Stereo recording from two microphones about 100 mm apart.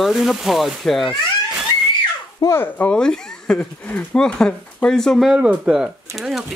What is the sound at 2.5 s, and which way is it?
Speech, 20° left (ahead or behind).